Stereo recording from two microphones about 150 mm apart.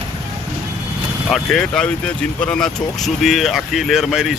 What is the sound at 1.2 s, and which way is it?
Speech, 5° left (ahead or behind).